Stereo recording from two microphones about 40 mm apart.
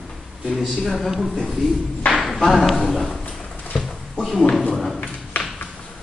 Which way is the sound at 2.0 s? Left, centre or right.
Left.